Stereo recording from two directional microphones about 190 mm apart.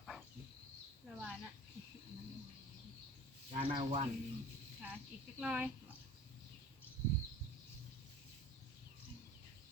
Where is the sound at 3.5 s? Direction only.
30° right (ahead or behind).